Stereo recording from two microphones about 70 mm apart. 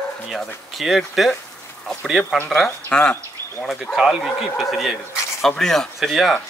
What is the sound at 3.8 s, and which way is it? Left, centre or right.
Speech, centre.